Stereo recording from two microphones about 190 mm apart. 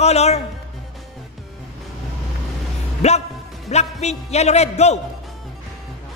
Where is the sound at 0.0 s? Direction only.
35° left (ahead or behind).